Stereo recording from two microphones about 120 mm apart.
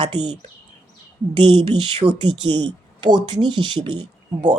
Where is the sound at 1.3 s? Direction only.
40° right (ahead or behind).